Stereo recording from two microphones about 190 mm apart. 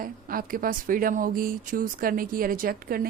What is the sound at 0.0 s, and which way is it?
A woman's voice, 50° right (ahead or behind).